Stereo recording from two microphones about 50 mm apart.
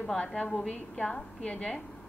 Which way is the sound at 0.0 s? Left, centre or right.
Left.